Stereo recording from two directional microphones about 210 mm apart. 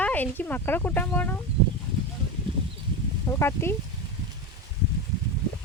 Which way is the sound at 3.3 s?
10° left (ahead or behind).